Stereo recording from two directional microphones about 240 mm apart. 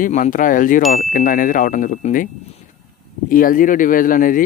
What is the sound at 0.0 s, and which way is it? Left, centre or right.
Speech, left.